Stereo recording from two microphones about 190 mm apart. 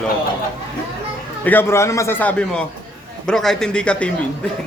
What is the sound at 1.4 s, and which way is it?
A man's voice, 10° left (ahead or behind).